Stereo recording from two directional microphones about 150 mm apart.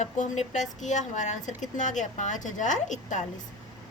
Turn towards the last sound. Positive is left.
turn(degrees=55)  # may be behind; listen again after turning